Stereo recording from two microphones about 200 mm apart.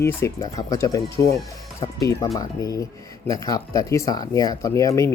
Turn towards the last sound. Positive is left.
turn(degrees=15)  # may be behind; listen again after turning